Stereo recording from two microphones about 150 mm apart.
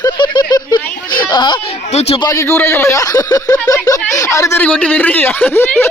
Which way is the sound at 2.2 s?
20° left (ahead or behind).